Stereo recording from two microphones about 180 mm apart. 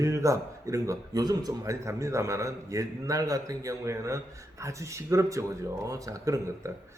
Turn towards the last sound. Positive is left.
turn(degrees=-15)  # may be behind; listen again after turning